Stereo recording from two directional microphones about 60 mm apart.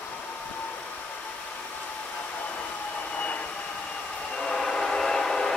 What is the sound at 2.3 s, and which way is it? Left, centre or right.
Vehicle, left.